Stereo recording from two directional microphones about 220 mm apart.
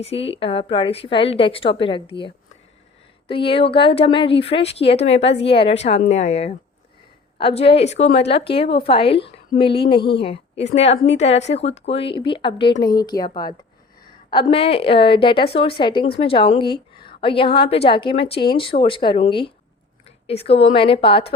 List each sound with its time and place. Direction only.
0.0 s a woman's voice: 25° left (ahead or behind)
14.3 s a woman's voice: 25° left (ahead or behind)